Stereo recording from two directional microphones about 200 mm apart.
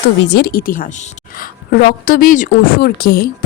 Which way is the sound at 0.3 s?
55° left (ahead or behind).